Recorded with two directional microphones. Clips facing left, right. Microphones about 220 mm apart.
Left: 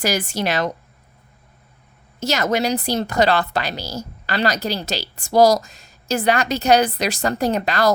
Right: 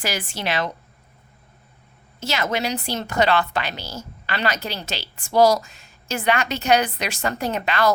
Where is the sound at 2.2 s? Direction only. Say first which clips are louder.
Left 5 dB; 40° left (ahead or behind).